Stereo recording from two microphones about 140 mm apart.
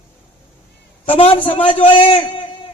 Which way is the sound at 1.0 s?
40° left (ahead or behind).